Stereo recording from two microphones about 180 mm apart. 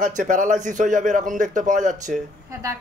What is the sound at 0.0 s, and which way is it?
Speech, 45° right (ahead or behind).